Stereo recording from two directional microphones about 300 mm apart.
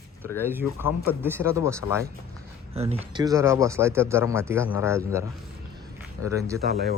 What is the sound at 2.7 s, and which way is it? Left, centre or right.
Speech, centre.